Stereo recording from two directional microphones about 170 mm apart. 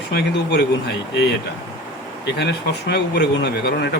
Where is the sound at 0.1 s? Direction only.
75° left (ahead or behind).